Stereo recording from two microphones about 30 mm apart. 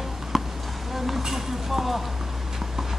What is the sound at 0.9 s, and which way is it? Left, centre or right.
Speech, centre.